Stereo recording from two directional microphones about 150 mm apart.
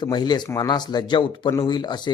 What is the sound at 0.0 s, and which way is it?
Speech, 30° left (ahead or behind).